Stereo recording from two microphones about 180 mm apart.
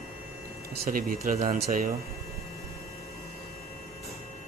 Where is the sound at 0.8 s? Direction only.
55° right (ahead or behind).